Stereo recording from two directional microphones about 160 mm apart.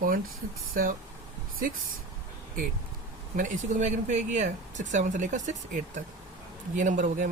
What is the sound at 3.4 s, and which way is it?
Speech, 50° right (ahead or behind).